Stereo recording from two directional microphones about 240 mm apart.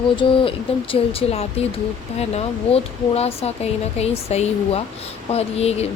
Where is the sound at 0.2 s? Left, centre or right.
Left.